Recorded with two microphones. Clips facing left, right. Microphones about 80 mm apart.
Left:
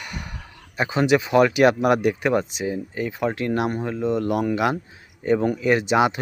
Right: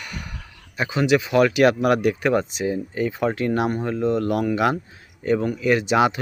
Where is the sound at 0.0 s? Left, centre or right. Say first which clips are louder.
Even; left.